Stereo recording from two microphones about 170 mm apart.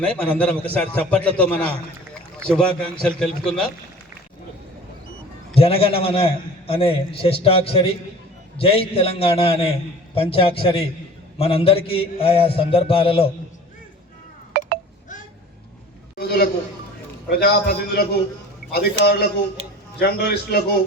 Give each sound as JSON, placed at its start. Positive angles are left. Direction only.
{"t": 0.0, "sound": "a man's voice", "side_deg": 5}
{"t": 5.5, "sound": "a man's voice", "side_deg": 35}
{"t": 14.5, "sound": "a sound", "side_deg": -60}
{"t": 16.1, "sound": "a man's voice", "side_deg": 70}